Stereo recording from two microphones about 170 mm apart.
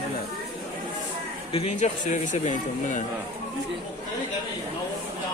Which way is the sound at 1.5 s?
35° left (ahead or behind).